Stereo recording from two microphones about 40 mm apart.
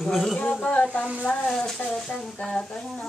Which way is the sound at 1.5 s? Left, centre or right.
Centre.